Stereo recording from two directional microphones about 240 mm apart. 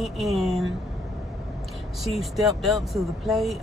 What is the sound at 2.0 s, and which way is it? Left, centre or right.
A woman's voice, centre.